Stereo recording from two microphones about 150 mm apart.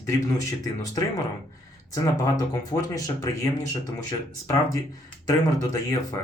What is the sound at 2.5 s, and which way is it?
Speech, 25° left (ahead or behind).